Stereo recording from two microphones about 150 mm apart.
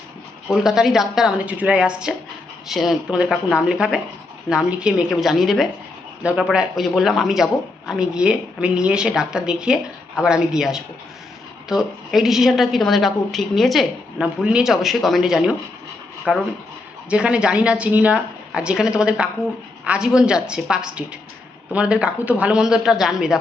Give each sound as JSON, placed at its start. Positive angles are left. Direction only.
{"t": 0.5, "sound": "speech", "side_deg": -5}